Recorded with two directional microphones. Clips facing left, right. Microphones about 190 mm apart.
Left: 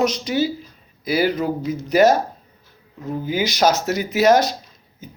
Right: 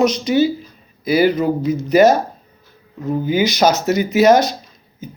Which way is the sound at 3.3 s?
Centre (ahead or behind).